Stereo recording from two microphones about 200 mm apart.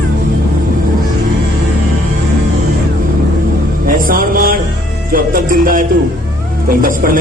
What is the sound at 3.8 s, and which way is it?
Music, 45° right (ahead or behind).